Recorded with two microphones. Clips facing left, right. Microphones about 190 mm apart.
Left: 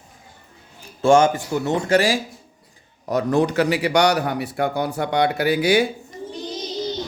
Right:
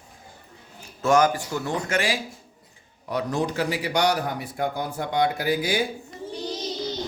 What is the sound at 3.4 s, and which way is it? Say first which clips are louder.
Speech: left 6 dB; 70° left (ahead or behind).